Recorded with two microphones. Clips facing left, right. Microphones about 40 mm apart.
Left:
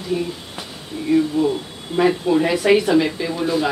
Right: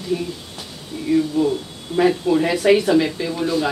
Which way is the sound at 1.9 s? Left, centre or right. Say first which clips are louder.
Even; centre.